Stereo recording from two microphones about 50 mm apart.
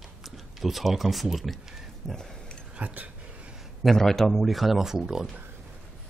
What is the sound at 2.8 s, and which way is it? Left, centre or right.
Speech, right.